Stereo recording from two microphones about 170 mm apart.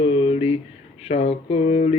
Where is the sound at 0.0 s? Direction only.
30° left (ahead or behind).